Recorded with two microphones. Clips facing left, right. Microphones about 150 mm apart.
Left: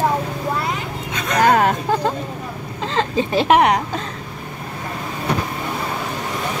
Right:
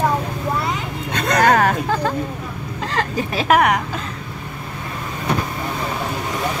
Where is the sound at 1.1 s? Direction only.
70° right (ahead or behind).